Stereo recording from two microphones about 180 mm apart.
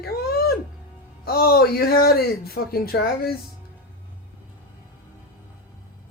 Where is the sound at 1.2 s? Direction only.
55° left (ahead or behind).